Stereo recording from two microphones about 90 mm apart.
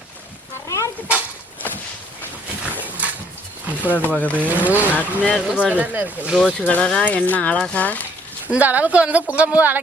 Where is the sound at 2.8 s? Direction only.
15° right (ahead or behind).